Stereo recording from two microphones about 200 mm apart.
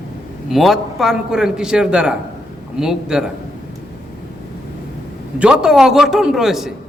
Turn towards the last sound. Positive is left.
turn(degrees=0)  # may be behind; listen again after turning